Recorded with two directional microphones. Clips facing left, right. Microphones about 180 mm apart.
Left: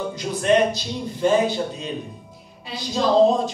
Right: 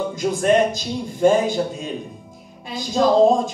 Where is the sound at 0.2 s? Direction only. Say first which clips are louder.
Right 1 dB; 45° right (ahead or behind).